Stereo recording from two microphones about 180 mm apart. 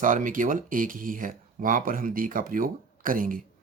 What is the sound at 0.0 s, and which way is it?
Speech, 45° right (ahead or behind).